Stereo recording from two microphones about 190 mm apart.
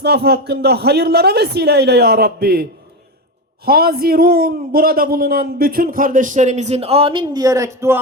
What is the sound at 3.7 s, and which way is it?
A man's voice, 55° right (ahead or behind).